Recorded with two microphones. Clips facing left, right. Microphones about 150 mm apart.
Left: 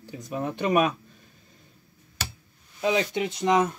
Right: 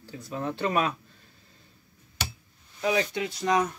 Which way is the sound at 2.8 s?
20° left (ahead or behind).